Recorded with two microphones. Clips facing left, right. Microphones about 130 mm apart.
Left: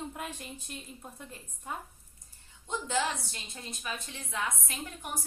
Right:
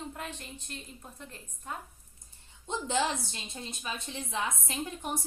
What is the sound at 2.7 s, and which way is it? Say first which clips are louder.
A woman's voice: right 1 dB; 25° right (ahead or behind).